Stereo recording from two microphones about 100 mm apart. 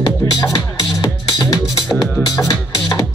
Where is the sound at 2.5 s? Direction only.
40° left (ahead or behind).